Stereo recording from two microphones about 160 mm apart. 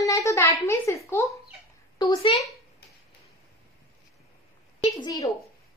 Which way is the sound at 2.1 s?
40° left (ahead or behind).